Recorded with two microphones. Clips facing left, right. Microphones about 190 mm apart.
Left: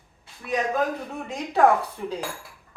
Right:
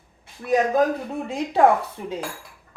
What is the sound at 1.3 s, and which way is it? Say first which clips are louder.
Speech: right 2 dB; 30° right (ahead or behind).